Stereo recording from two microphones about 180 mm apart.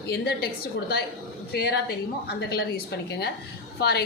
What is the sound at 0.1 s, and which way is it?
A woman's voice, 65° left (ahead or behind).